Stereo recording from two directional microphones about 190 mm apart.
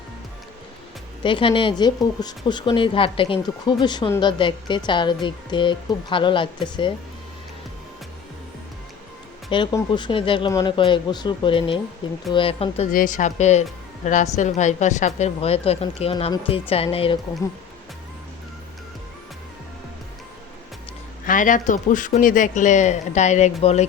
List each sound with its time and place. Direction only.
1.2 s speech: 25° left (ahead or behind)
9.5 s speech: 25° left (ahead or behind)
12.9 s speech: 45° left (ahead or behind); by 17.2 s 30° left (ahead or behind)
21.2 s speech: 45° left (ahead or behind)